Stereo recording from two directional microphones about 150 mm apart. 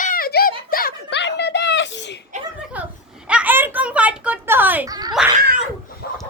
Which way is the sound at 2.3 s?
55° right (ahead or behind).